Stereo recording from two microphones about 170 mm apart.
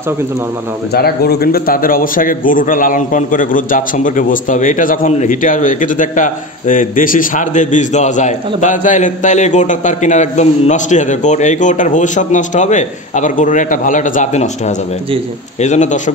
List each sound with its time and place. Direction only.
0.9 s a man's voice: 65° left (ahead or behind); by 16.0 s 45° left (ahead or behind)